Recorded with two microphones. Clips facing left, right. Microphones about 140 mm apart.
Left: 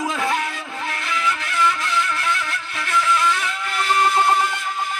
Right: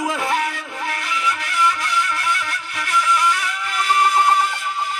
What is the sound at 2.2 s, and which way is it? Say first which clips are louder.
Music: even; 15° right (ahead or behind).